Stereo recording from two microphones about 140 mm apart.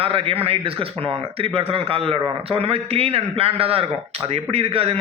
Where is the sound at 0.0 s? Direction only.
40° right (ahead or behind).